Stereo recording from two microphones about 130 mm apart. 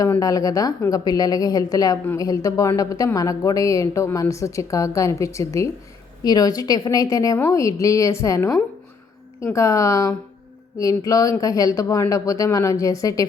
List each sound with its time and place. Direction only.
0.2 s speech: 25° left (ahead or behind)